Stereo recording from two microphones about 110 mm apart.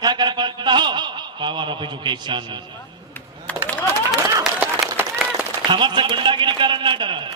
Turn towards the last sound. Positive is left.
turn(degrees=-45)  # may be behind; listen again after turning